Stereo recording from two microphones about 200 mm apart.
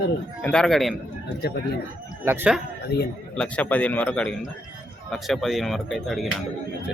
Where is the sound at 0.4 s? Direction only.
5° left (ahead or behind).